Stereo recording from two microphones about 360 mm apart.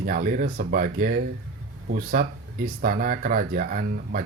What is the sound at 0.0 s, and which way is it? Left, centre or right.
Speech, right.